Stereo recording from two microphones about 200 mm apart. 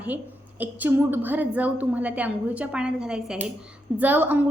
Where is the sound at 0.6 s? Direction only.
10° right (ahead or behind).